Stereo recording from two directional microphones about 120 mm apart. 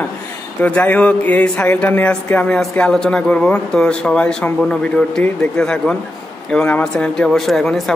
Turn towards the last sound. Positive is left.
turn(degrees=0)  # may be behind; listen again after turning